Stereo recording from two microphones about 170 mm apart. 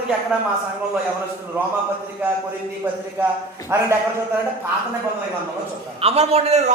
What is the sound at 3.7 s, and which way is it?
Speech, 15° right (ahead or behind).